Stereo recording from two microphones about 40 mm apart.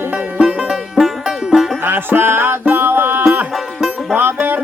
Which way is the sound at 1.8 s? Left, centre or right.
Right.